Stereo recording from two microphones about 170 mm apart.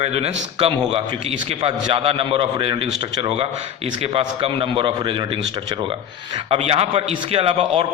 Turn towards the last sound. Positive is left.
turn(degrees=-35)  # may be behind; listen again after turning